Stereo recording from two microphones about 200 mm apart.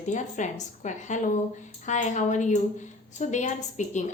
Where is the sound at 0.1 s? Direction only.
35° left (ahead or behind).